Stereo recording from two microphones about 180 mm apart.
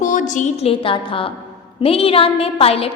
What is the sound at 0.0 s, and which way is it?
A woman's voice, 45° left (ahead or behind).